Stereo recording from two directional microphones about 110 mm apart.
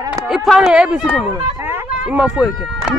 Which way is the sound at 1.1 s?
20° right (ahead or behind).